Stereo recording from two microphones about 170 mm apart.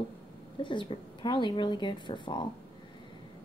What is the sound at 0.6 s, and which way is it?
Speech, 30° left (ahead or behind).